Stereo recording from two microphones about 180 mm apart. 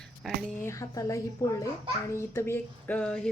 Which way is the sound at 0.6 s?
20° left (ahead or behind).